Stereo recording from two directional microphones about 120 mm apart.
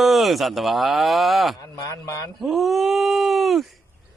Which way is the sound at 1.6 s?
35° left (ahead or behind).